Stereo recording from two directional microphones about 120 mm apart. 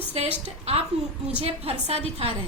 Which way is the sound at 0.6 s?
55° right (ahead or behind).